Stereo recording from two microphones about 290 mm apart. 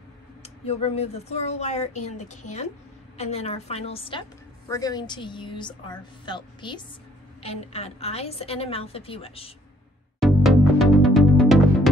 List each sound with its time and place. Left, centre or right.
0.4 s a woman's voice: left
10.2 s music: centre